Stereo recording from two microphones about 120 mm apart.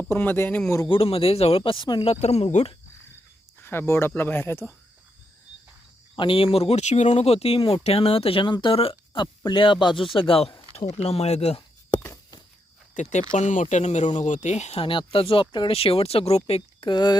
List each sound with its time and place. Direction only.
0.0 s speech: 15° left (ahead or behind)
0.9 s speech: 50° left (ahead or behind)
2.0 s speech: 60° left (ahead or behind)
3.6 s speech: 20° left (ahead or behind)
6.1 s speech: 45° left (ahead or behind)
10.8 s speech: 60° left (ahead or behind)
11.9 s walk: 20° left (ahead or behind)
12.9 s speech: 90° left; by 16.9 s 55° left (ahead or behind)
16.9 s speech: 35° left (ahead or behind)